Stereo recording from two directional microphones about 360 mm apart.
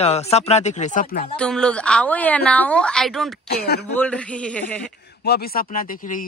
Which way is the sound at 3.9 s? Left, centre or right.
Centre.